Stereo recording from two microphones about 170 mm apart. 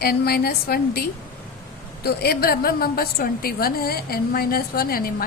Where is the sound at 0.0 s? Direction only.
65° left (ahead or behind).